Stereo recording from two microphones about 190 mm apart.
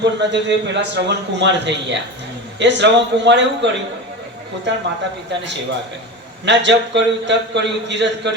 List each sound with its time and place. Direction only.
0.0 s a man's voice: 65° right (ahead or behind)